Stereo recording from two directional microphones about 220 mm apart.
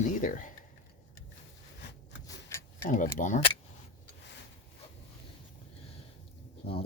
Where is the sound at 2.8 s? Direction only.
35° left (ahead or behind).